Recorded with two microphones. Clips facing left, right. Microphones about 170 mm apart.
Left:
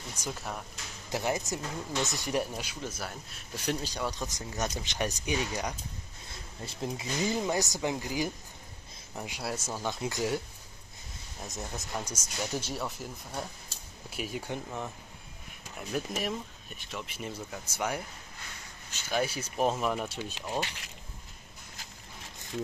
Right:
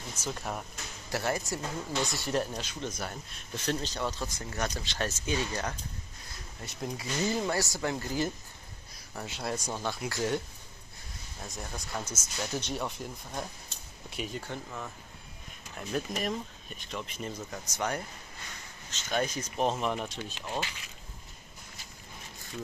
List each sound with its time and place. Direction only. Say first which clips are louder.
0.1 s speech: right 1 dB; 10° left (ahead or behind)
0.4 s speech: right 2 dB; 5° right (ahead or behind)
1.1 s speech: even; 20° left (ahead or behind)
6.6 s speech: left 1 dB; 25° left (ahead or behind); by 9.8 s 5° left (ahead or behind)
9.8 s speech: left 1 dB; 15° left (ahead or behind)
11.4 s speech: left 2 dB; 20° left (ahead or behind)
15.7 s speech: even; 5° left (ahead or behind)